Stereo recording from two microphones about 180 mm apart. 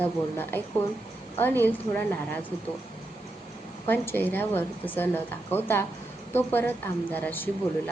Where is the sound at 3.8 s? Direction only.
10° left (ahead or behind).